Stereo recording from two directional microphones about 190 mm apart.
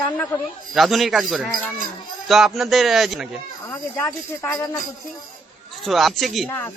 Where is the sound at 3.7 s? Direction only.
10° left (ahead or behind).